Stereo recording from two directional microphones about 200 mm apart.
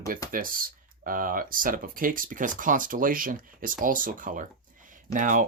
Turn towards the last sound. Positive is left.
turn(degrees=-40)  # may be behind; listen again after turning